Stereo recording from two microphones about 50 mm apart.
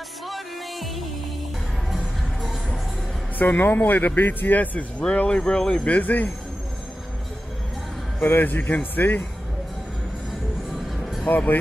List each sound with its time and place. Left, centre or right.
0.3 s music: centre
2.4 s music: centre
3.3 s a man's voice: left; by 5.8 s centre
5.9 s a man's voice: left
8.2 s a man's voice: left
10.7 s music: centre
11.2 s a man's voice: left